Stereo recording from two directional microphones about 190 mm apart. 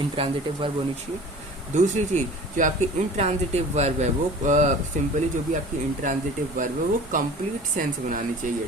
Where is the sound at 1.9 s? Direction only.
40° right (ahead or behind).